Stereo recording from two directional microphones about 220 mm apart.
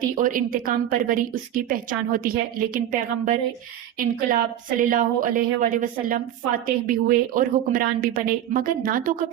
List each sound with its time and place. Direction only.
0.0 s a woman's voice: 40° right (ahead or behind)